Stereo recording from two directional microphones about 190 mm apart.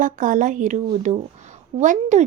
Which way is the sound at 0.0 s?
45° right (ahead or behind).